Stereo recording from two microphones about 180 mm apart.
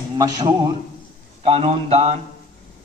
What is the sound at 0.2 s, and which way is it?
Speech, 20° right (ahead or behind).